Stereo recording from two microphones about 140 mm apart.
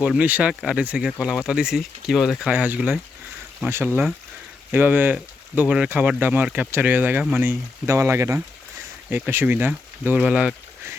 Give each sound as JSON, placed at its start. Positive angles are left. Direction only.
{"t": 0.0, "sound": "speech", "side_deg": -10}